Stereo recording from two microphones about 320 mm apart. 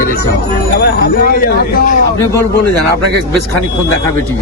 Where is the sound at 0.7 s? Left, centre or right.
Left.